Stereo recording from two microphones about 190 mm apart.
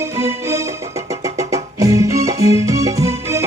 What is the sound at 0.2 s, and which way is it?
Music, 15° right (ahead or behind).